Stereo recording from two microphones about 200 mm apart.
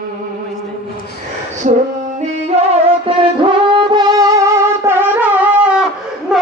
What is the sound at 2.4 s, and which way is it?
Music, 30° right (ahead or behind).